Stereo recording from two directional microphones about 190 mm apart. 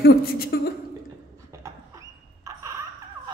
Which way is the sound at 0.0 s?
55° left (ahead or behind).